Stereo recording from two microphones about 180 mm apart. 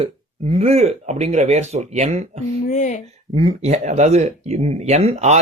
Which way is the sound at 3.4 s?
35° right (ahead or behind).